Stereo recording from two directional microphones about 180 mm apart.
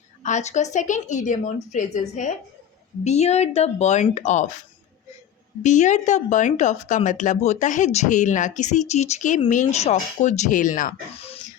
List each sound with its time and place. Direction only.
0.2 s a woman's voice: 40° left (ahead or behind)
5.6 s speech: 40° left (ahead or behind)